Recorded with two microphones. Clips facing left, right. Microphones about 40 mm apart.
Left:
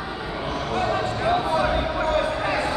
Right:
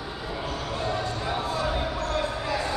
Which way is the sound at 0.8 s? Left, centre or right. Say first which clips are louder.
Left 6 dB; left.